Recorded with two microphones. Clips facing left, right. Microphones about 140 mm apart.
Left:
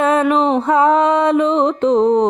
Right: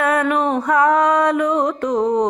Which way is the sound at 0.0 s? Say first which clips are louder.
Left 4 dB; 20° left (ahead or behind).